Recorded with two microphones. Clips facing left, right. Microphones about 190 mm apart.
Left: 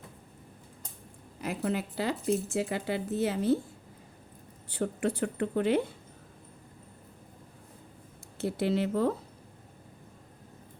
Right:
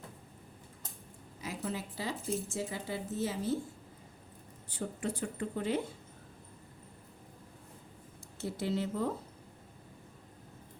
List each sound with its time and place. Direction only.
1.4 s speech: 60° left (ahead or behind)
4.7 s speech: 65° left (ahead or behind)
8.4 s speech: 65° left (ahead or behind)